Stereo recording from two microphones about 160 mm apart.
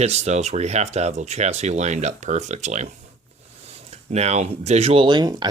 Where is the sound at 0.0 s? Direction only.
45° right (ahead or behind).